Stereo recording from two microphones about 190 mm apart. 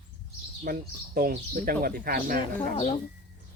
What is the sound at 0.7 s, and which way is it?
Speech, 45° right (ahead or behind).